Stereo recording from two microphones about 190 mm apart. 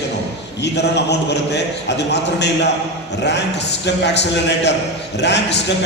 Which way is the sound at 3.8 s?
65° left (ahead or behind).